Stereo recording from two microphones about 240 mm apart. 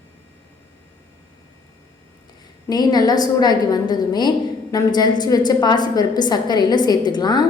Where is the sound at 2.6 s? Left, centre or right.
Centre.